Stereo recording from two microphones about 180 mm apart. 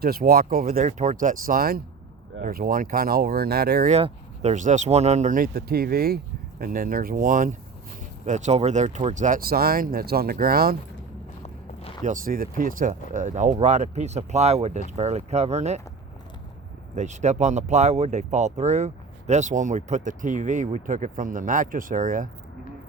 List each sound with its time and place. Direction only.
0.0 s speech: 55° right (ahead or behind)
0.8 s speech: 40° right (ahead or behind); by 3.8 s 60° right (ahead or behind)
3.8 s speech: 35° right (ahead or behind); by 10.8 s 55° right (ahead or behind)
11.4 s walk: 30° left (ahead or behind)
12.0 s speech: 50° right (ahead or behind)
16.9 s speech: 40° right (ahead or behind)